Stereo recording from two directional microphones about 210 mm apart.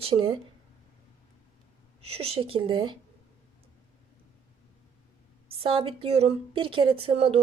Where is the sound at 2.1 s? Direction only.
30° right (ahead or behind).